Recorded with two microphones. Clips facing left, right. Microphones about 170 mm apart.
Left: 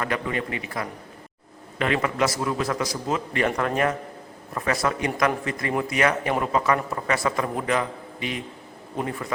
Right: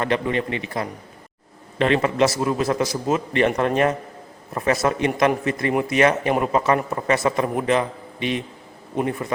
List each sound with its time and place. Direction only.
0.0 s a man's voice: 25° right (ahead or behind)